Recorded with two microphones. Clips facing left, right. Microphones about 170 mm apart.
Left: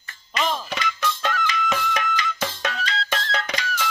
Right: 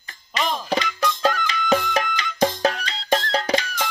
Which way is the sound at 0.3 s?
35° right (ahead or behind).